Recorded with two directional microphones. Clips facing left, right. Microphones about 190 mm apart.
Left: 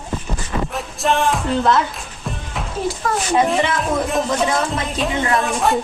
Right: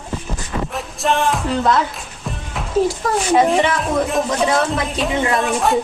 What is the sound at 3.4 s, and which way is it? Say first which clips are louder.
A woman's voice: right 2 dB; centre (ahead or behind).